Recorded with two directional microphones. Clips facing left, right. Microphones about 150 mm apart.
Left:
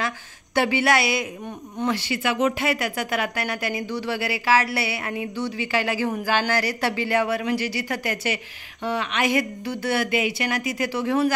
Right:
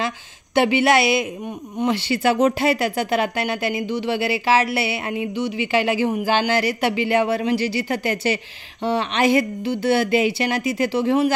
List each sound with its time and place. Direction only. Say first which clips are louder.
0.6 s speech: right 4 dB; 25° right (ahead or behind)
2.0 s speech: right 5 dB; 30° right (ahead or behind)